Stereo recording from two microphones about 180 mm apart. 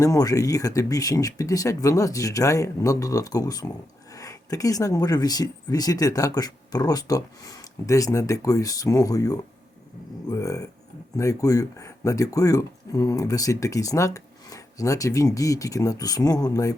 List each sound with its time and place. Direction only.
0.0 s speech: 20° left (ahead or behind)